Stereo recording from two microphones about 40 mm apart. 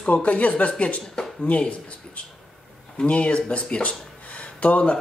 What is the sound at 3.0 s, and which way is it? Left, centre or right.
Speech, left.